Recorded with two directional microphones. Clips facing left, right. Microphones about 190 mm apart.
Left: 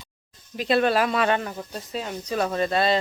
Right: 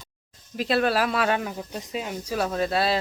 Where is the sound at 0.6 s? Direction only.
Centre (ahead or behind).